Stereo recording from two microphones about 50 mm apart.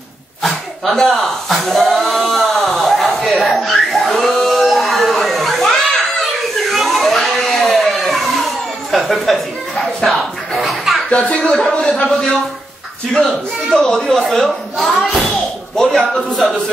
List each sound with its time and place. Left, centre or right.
0.4 s a sound: centre
11.1 s speech: left
12.0 s a man's voice: centre
15.7 s speech: centre